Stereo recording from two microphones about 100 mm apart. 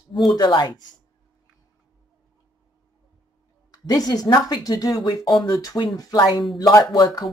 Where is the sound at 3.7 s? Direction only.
40° left (ahead or behind).